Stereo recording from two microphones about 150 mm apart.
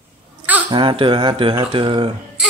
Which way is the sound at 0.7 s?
35° right (ahead or behind).